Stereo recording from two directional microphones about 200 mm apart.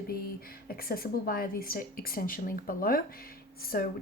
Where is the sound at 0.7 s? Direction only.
50° left (ahead or behind).